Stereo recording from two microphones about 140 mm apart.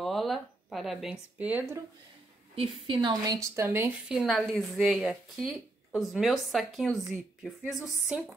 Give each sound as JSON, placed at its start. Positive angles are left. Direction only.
{"t": 0.0, "sound": "speech", "side_deg": 0}
{"t": 2.5, "sound": "a woman's voice", "side_deg": -40}
{"t": 4.2, "sound": "speech", "side_deg": 0}